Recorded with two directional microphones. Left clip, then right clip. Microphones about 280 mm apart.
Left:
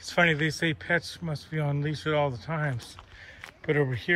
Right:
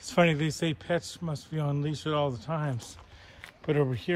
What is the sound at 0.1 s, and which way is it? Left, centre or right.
A man's voice, centre.